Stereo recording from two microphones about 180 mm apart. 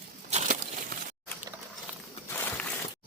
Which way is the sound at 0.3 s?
40° right (ahead or behind).